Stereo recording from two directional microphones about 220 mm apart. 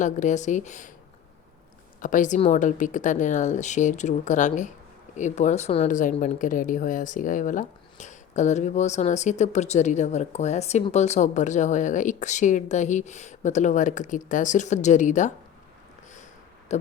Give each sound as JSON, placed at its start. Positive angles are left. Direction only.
{"t": 0.0, "sound": "speech", "side_deg": 35}
{"t": 2.0, "sound": "speech", "side_deg": 35}